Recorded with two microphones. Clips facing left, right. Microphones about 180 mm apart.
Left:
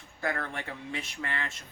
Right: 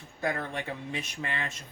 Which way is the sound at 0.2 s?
20° right (ahead or behind).